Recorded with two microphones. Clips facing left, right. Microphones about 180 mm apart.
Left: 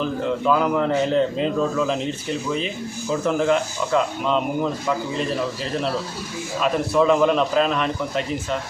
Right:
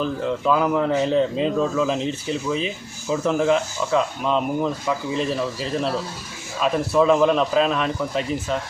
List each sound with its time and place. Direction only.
0.4 s speech: 5° right (ahead or behind)
3.1 s speech: centre (ahead or behind)
6.6 s speech: centre (ahead or behind)